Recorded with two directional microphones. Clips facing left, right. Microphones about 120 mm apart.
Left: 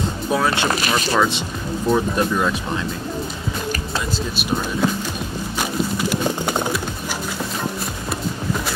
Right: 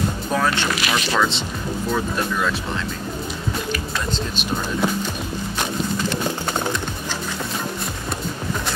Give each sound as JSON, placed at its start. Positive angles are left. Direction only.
{"t": 0.3, "sound": "speech", "side_deg": 10}
{"t": 0.7, "sound": "speech", "side_deg": 40}
{"t": 1.1, "sound": "speech", "side_deg": 15}
{"t": 6.0, "sound": "music", "side_deg": 10}